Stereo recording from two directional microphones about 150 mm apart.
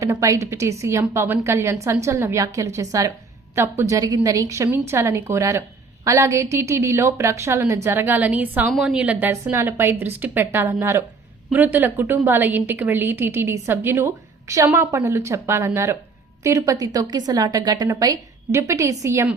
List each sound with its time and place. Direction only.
0.0 s a woman's voice: 20° right (ahead or behind)